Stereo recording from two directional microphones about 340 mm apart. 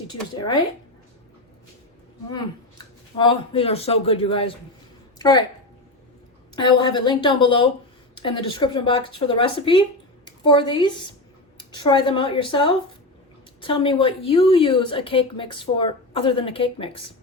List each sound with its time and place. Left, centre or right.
0.3 s a woman's voice: centre
2.3 s a woman's voice: centre
6.6 s a woman's voice: centre